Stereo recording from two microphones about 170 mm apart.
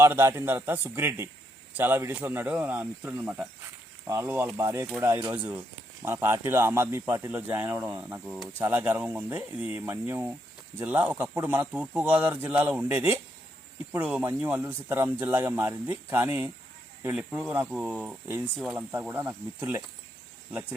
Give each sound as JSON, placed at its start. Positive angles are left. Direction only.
{"t": 0.0, "sound": "speech", "side_deg": -15}